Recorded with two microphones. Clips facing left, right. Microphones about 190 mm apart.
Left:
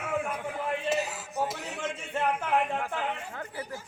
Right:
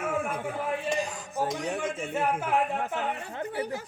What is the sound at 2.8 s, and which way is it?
Speech, 20° right (ahead or behind).